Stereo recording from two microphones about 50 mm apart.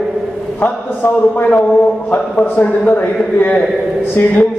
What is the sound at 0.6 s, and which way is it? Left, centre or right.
Speech, left.